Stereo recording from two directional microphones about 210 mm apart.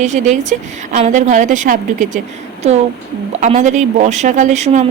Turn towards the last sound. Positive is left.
turn(degrees=-35)  # may be behind; listen again after turning